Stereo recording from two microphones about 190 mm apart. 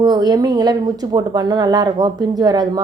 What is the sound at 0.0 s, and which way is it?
A woman's voice, 20° right (ahead or behind).